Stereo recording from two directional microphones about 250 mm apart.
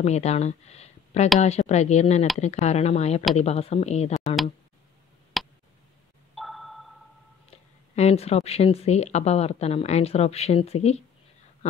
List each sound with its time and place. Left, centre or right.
0.0 s speech: left
5.4 s tick: centre
6.3 s sonar: centre
7.9 s speech: left